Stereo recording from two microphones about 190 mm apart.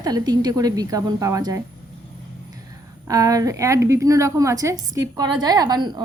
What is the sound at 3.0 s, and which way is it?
A woman's voice, 20° right (ahead or behind).